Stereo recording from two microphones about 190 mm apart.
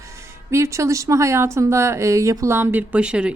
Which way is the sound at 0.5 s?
15° right (ahead or behind).